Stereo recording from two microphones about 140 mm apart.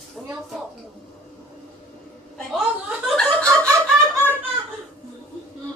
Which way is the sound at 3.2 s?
10° left (ahead or behind).